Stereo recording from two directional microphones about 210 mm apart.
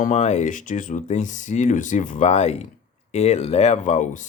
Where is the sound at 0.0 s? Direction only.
35° left (ahead or behind).